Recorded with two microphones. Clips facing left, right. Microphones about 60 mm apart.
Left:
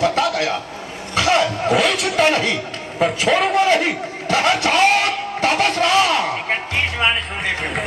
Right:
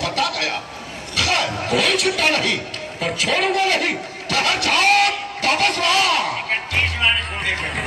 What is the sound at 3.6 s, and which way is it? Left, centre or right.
A man's voice, left.